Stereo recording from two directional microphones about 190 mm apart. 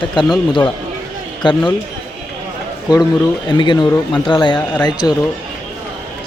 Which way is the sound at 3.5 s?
25° left (ahead or behind).